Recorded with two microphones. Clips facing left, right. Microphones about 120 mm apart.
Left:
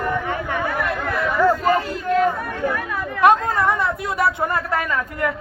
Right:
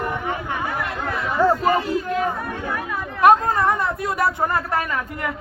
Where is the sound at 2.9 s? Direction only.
65° left (ahead or behind).